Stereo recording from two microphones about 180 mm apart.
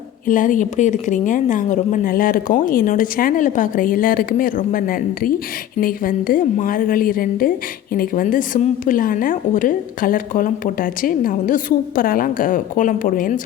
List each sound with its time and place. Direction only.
0.3 s a woman's voice: 45° left (ahead or behind)